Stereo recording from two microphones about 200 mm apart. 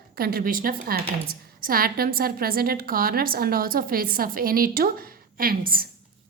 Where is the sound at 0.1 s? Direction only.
50° right (ahead or behind).